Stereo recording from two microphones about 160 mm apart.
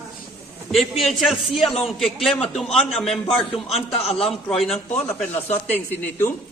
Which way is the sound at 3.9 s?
40° left (ahead or behind).